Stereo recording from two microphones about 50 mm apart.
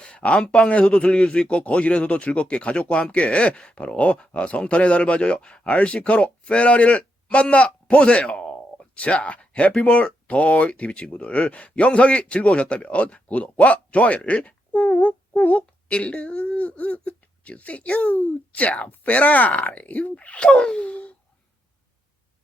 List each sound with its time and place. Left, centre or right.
0.0 s speech: left